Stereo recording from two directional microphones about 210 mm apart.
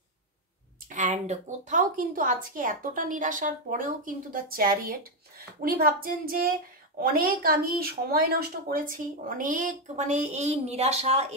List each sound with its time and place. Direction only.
0.8 s a woman's voice: 35° right (ahead or behind)
5.6 s child singing: 45° right (ahead or behind)
7.0 s a woman's voice: 45° right (ahead or behind)